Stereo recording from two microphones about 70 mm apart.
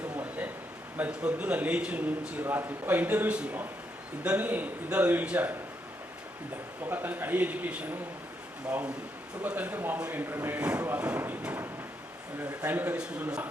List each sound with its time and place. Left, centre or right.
0.2 s a sound: right
0.9 s a man's voice: right
6.8 s a man's voice: right
9.4 s a man's voice: right
12.6 s a man's voice: right